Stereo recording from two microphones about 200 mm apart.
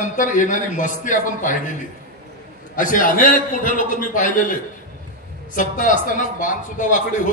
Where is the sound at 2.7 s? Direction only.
40° left (ahead or behind).